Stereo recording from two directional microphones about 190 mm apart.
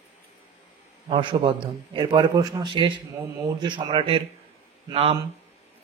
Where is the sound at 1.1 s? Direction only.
25° right (ahead or behind).